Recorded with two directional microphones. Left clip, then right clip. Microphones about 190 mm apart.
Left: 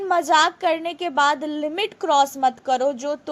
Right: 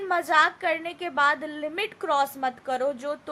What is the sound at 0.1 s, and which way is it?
A woman's voice, 20° left (ahead or behind).